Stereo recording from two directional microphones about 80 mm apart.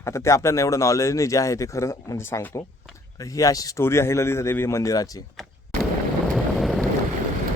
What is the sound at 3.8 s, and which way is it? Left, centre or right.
A man's voice, left.